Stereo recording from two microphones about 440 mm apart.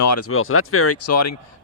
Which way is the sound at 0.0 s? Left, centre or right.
Left.